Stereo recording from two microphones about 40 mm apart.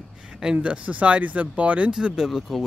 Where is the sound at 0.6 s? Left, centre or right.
Right.